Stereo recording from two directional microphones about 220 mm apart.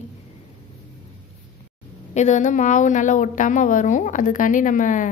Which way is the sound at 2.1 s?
30° left (ahead or behind).